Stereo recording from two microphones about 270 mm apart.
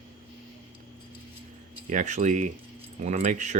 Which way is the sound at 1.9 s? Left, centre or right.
Right.